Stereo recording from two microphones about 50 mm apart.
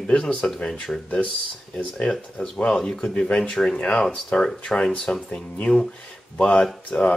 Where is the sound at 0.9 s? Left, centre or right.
Centre.